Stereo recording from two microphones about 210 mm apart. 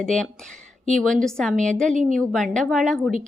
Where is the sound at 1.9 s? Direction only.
35° right (ahead or behind).